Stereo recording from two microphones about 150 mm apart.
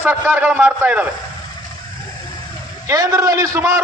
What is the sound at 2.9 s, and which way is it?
Speech, 20° right (ahead or behind).